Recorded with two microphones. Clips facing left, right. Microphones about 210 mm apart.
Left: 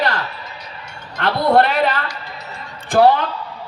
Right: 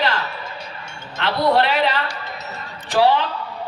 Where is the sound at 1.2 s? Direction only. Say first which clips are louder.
Left 3 dB; 50° left (ahead or behind).